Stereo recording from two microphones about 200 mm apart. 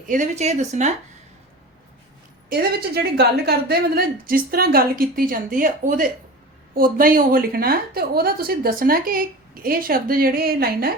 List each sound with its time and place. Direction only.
0.1 s a woman's voice: 35° right (ahead or behind)
2.5 s a woman's voice: 50° right (ahead or behind)